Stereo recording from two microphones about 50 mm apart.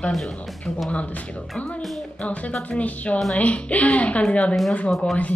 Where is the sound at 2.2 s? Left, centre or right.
Left.